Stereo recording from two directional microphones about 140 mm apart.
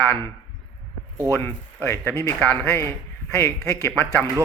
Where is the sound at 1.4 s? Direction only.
15° left (ahead or behind).